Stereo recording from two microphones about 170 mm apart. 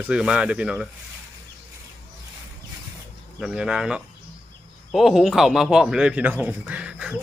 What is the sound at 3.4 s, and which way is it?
Speech, 5° right (ahead or behind).